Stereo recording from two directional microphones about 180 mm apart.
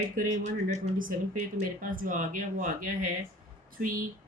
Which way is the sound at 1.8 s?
50° right (ahead or behind).